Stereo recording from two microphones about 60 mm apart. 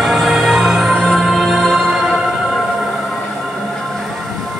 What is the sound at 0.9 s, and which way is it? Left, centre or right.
Music, centre.